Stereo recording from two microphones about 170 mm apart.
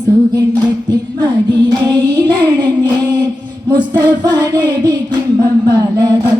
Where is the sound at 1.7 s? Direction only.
25° right (ahead or behind).